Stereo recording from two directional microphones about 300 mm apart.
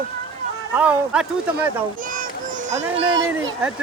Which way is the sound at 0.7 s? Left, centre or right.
Centre.